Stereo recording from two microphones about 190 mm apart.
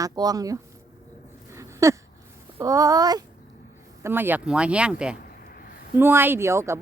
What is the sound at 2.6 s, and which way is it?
Speech, 15° right (ahead or behind).